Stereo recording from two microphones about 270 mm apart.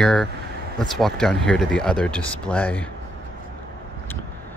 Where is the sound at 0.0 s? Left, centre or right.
Centre.